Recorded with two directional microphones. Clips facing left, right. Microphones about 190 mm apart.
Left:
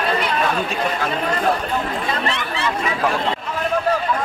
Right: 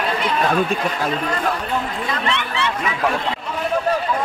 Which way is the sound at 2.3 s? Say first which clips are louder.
Right 1 dB; 35° left (ahead or behind).